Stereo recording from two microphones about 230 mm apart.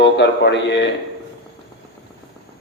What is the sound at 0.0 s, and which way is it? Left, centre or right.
Speech, left.